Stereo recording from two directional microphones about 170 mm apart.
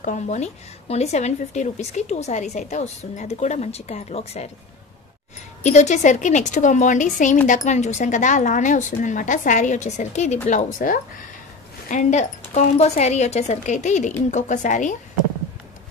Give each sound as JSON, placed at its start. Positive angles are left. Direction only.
{"t": 0.0, "sound": "speech", "side_deg": 45}
{"t": 5.6, "sound": "speech", "side_deg": 45}